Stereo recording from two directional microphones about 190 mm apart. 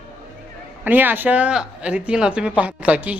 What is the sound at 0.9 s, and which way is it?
Speech, 10° right (ahead or behind).